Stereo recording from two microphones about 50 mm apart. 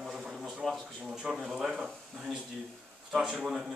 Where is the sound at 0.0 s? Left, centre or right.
Centre.